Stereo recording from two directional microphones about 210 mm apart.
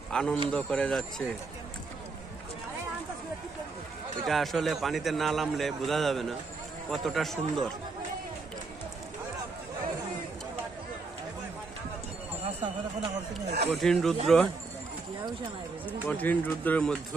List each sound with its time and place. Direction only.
0.1 s a man's voice: 5° left (ahead or behind)
4.3 s a man's voice: centre (ahead or behind)
12.4 s speech: 30° right (ahead or behind)
13.7 s a man's voice: centre (ahead or behind)
16.1 s speech: 10° left (ahead or behind)